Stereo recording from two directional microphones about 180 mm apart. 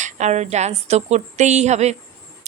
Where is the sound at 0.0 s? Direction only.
40° right (ahead or behind).